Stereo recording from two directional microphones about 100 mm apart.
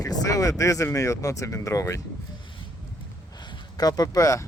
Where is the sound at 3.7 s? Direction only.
40° left (ahead or behind).